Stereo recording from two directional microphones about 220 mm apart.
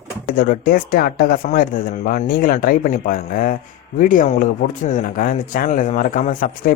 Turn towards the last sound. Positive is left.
turn(degrees=35)  # may be behind; listen again after turning